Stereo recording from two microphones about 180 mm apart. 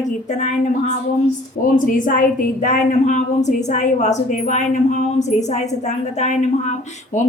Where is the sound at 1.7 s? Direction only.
50° left (ahead or behind).